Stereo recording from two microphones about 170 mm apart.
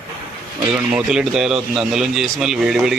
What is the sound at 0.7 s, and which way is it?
A man's voice, 5° right (ahead or behind).